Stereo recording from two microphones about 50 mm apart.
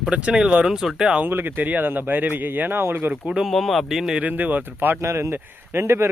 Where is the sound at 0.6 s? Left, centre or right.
Centre.